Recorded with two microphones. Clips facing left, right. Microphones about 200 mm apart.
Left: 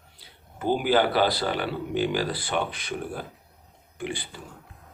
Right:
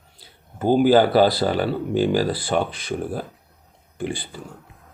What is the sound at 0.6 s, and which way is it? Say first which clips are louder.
Speech: right 7 dB; 40° right (ahead or behind).